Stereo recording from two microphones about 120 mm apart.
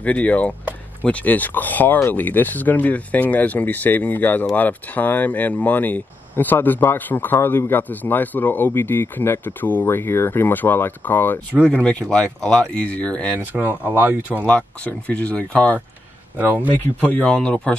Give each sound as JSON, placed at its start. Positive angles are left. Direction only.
{"t": 0.0, "sound": "speech", "side_deg": 10}
{"t": 13.5, "sound": "speech", "side_deg": -15}
{"t": 14.4, "sound": "speech", "side_deg": 10}
{"t": 16.3, "sound": "speech", "side_deg": -15}
{"t": 17.1, "sound": "speech", "side_deg": 10}